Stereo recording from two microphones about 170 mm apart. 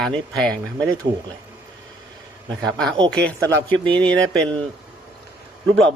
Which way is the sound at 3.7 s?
30° right (ahead or behind).